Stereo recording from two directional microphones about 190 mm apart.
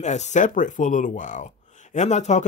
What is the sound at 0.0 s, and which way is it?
Speech, 35° left (ahead or behind).